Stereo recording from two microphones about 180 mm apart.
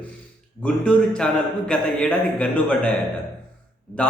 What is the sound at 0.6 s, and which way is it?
A man's voice, 5° left (ahead or behind).